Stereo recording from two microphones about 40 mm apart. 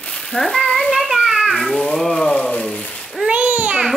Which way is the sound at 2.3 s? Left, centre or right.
Left.